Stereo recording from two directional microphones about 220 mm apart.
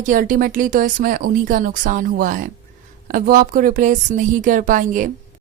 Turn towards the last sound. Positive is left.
turn(degrees=-35)  # may be behind; listen again after turning